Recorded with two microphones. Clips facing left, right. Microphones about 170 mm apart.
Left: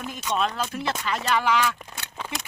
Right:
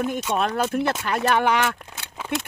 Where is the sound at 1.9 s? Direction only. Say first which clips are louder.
Right 6 dB; 5° right (ahead or behind).